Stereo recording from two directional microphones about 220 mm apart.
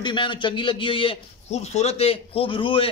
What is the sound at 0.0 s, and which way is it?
A man's voice, 20° left (ahead or behind).